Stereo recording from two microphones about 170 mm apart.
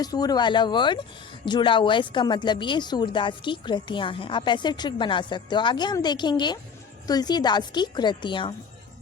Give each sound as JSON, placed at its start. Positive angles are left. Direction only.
{"t": 0.0, "sound": "speech", "side_deg": 20}